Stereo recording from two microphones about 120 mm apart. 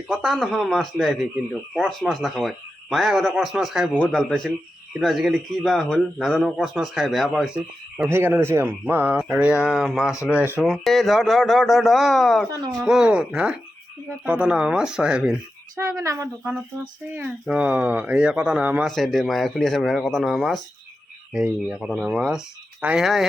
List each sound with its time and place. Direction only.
0.1 s a man's voice: centre (ahead or behind)
8.1 s a man's voice: 20° right (ahead or behind); by 10.2 s centre (ahead or behind)
10.2 s speech: 15° right (ahead or behind)
10.7 s speech: centre (ahead or behind)
15.9 s a man's voice: 25° right (ahead or behind)
16.4 s speech: 10° right (ahead or behind)
18.9 s speech: centre (ahead or behind)